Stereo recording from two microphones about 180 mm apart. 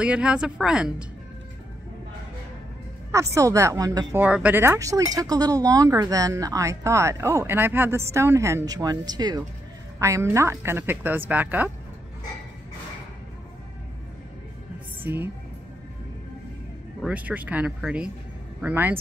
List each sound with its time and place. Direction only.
0.0 s speech: 5° right (ahead or behind)
3.1 s speech: 15° right (ahead or behind)
4.2 s speech: 10° right (ahead or behind)
17.0 s speech: 10° right (ahead or behind)